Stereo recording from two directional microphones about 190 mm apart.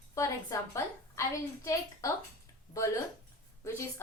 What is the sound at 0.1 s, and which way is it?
A woman's voice, 15° left (ahead or behind).